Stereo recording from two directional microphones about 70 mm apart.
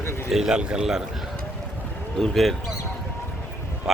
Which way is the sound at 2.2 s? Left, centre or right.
Centre.